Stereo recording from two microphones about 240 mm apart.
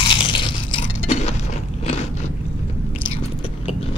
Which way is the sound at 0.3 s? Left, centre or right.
Left.